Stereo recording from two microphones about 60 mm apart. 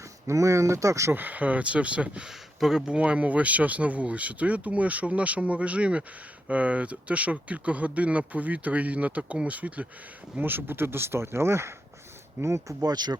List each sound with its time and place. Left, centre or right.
0.3 s speech: right
1.1 s speech: right
2.2 s speech: centre; by 12.7 s right